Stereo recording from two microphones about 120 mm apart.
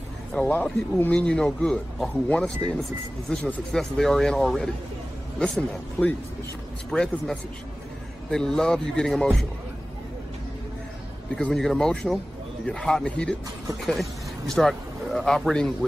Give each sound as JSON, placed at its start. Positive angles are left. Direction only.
{"t": 0.3, "sound": "a man's voice", "side_deg": 10}
{"t": 11.3, "sound": "a man's voice", "side_deg": 5}
{"t": 14.5, "sound": "speech", "side_deg": 0}